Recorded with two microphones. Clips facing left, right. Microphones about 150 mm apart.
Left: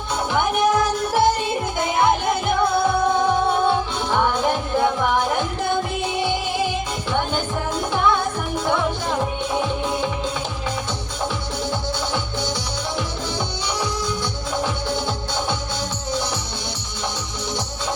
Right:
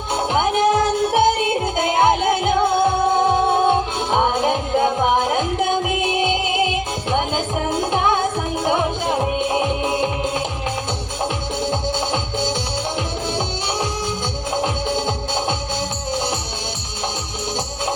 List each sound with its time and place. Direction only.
0.3 s music: 25° right (ahead or behind)
11.6 s music: 20° right (ahead or behind)
14.5 s music: 20° right (ahead or behind)